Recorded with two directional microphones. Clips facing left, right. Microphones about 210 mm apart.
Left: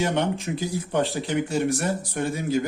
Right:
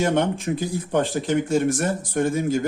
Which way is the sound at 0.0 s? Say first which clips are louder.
Right 3 dB; 50° right (ahead or behind).